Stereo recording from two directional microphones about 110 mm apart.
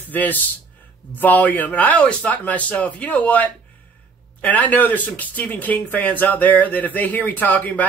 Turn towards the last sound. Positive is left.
turn(degrees=15)  # may be behind; listen again after turning